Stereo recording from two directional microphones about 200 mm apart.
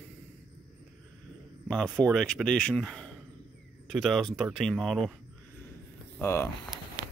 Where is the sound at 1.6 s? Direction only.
5° left (ahead or behind).